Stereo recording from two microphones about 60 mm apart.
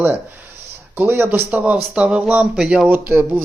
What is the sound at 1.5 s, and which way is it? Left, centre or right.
Speech, right.